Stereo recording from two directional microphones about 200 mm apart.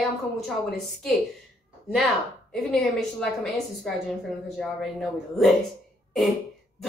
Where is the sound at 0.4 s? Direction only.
Centre (ahead or behind).